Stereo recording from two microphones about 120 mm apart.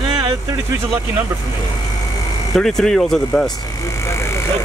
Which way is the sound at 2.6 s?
5° left (ahead or behind).